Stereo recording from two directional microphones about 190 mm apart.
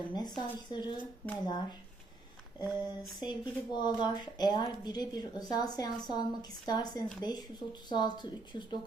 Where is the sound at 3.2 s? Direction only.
25° left (ahead or behind).